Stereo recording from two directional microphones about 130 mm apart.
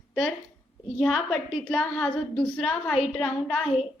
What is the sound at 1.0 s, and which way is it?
A woman's voice, centre (ahead or behind).